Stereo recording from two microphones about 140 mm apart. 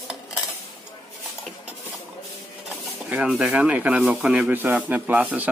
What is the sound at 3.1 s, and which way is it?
Speech, 5° right (ahead or behind).